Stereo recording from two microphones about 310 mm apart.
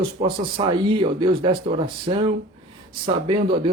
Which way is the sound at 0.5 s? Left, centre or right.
Centre.